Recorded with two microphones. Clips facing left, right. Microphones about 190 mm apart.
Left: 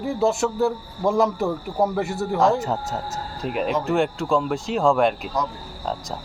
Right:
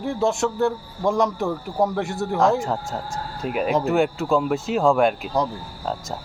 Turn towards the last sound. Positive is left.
turn(degrees=0)  # may be behind; listen again after turning